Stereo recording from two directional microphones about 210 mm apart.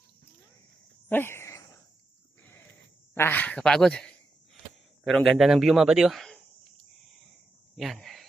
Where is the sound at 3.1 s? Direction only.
10° left (ahead or behind).